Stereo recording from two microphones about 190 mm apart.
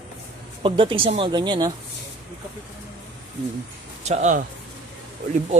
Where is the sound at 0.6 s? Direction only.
25° right (ahead or behind).